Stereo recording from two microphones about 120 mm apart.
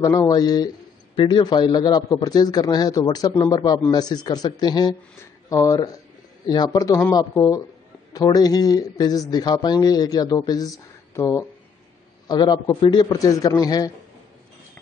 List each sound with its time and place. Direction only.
0.0 s a man's voice: 30° left (ahead or behind)
12.3 s speech: 40° left (ahead or behind)